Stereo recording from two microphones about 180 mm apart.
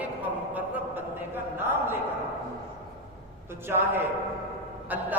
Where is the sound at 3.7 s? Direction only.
10° right (ahead or behind).